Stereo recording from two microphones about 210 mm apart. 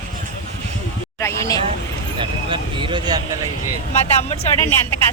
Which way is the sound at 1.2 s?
15° left (ahead or behind).